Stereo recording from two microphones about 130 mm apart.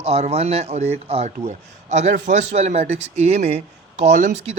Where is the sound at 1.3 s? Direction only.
65° right (ahead or behind).